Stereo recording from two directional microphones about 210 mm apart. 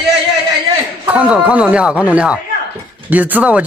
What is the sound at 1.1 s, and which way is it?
Speech, 5° right (ahead or behind).